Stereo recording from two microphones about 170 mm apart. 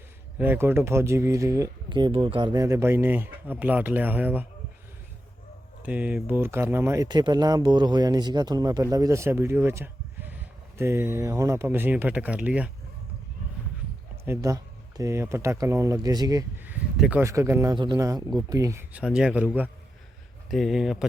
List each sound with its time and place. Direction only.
0.3 s speech: 10° right (ahead or behind)
5.8 s speech: 10° right (ahead or behind)
14.3 s speech: 20° right (ahead or behind)
16.6 s speech: 10° right (ahead or behind)